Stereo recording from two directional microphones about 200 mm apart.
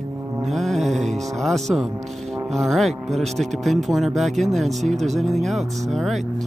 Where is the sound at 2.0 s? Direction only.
Centre (ahead or behind).